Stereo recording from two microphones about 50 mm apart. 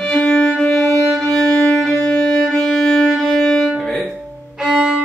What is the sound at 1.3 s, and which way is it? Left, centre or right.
Music, centre.